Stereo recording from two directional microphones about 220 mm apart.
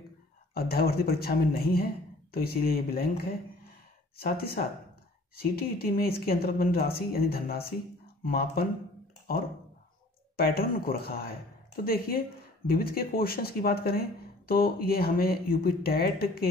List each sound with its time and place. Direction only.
0.6 s speech: 45° left (ahead or behind)
10.3 s speech: 45° left (ahead or behind)